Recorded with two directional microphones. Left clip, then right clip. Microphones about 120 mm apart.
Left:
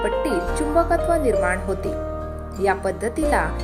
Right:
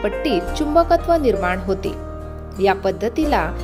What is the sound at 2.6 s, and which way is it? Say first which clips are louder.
Speech: right 4 dB; 35° right (ahead or behind).